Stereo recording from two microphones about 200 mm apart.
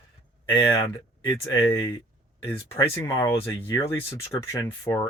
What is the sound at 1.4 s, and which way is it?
Speech, 15° left (ahead or behind).